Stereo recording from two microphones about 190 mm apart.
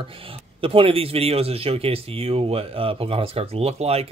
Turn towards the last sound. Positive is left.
turn(degrees=-30)  # may be behind; listen again after turning